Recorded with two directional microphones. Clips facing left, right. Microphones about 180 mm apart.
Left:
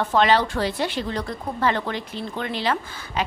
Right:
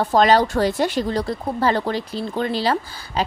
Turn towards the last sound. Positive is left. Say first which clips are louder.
# right 3 dB
turn(degrees=-35)  # may be behind; listen again after turning